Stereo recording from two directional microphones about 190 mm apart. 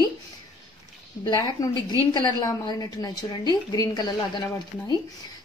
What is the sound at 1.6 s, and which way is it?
A woman's voice, 15° left (ahead or behind).